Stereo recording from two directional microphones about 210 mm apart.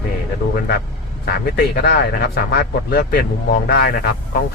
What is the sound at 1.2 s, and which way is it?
Speech, 45° left (ahead or behind).